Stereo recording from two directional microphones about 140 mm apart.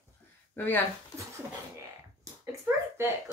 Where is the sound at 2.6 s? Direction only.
15° right (ahead or behind).